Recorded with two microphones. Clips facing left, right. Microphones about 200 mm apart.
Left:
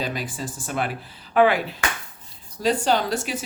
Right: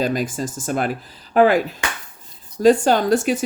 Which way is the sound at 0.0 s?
45° right (ahead or behind).